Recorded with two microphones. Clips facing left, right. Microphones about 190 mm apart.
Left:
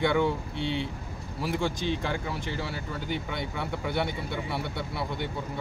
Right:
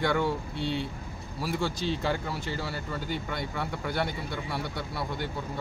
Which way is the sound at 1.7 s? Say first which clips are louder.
Left 1 dB; 55° left (ahead or behind).